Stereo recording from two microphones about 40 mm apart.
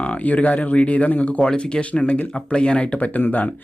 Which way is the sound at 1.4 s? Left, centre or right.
Left.